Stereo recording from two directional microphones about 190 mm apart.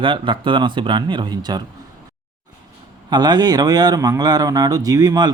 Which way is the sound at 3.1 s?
20° right (ahead or behind).